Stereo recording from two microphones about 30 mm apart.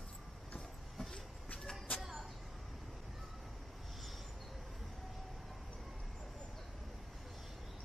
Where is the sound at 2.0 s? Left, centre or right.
Centre.